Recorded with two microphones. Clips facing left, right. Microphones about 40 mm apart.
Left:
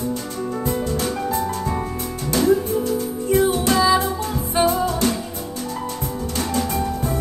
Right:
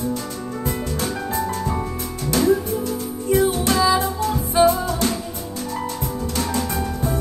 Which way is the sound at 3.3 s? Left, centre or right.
Left.